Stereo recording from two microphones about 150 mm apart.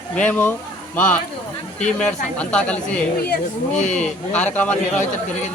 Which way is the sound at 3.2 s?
90° left.